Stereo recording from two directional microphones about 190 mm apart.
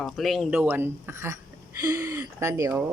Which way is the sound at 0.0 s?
Centre (ahead or behind).